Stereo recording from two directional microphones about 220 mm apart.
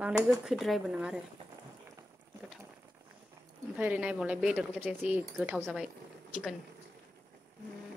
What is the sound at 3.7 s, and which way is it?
Speech, 5° right (ahead or behind).